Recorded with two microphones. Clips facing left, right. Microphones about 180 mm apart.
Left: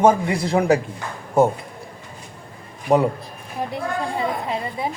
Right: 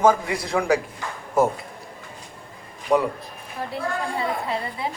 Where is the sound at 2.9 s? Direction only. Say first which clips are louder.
Left 3 dB; 25° left (ahead or behind).